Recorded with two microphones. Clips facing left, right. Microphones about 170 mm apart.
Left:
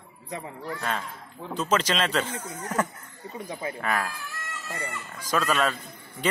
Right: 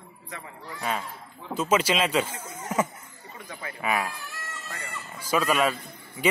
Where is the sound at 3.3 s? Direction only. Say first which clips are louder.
Left 6 dB; 35° left (ahead or behind).